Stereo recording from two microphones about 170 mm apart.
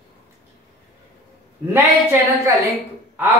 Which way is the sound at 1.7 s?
15° right (ahead or behind).